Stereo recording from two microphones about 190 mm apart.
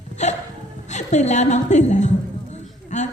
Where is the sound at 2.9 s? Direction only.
40° left (ahead or behind).